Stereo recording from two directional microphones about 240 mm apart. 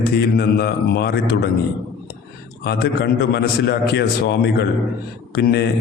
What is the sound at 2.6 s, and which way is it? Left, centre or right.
A man's voice, left.